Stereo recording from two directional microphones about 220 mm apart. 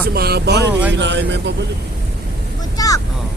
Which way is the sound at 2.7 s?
15° left (ahead or behind).